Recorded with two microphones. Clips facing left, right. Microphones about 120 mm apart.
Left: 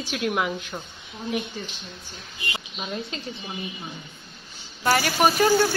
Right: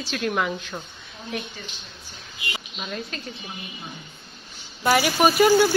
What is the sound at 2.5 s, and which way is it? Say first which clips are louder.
Speech: left 1 dB; 20° left (ahead or behind).